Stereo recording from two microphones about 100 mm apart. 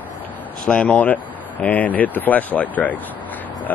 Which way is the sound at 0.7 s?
15° left (ahead or behind).